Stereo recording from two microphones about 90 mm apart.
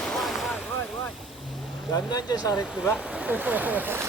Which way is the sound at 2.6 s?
10° right (ahead or behind).